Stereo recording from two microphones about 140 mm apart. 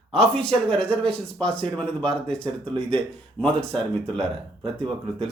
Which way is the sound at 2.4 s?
40° right (ahead or behind).